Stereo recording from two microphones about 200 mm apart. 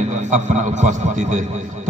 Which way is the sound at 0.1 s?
35° right (ahead or behind).